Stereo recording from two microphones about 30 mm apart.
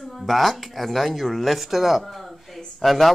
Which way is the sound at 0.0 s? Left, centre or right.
Centre.